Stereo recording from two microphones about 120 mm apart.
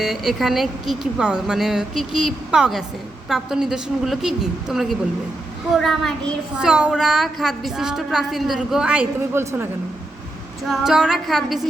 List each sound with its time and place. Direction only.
0.0 s a woman's voice: 5° right (ahead or behind)
9.3 s a woman's voice: 20° right (ahead or behind)
10.7 s a woman's voice: 5° right (ahead or behind)